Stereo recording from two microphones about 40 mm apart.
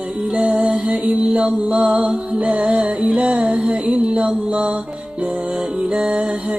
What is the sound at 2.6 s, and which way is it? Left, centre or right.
Music, centre.